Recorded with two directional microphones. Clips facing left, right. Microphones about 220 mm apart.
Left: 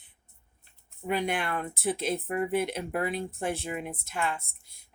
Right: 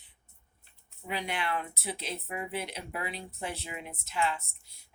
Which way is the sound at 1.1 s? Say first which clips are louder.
Left 5 dB; 50° left (ahead or behind).